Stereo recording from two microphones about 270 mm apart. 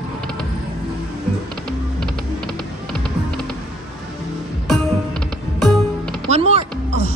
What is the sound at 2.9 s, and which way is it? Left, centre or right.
Music, centre.